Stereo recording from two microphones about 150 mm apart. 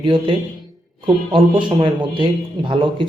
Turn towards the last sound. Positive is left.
turn(degrees=-35)  # may be behind; listen again after turning